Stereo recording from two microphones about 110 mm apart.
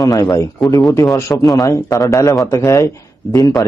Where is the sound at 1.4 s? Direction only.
40° left (ahead or behind).